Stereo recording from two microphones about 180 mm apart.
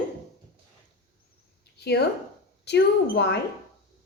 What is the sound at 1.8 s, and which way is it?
A woman's voice, 65° left (ahead or behind).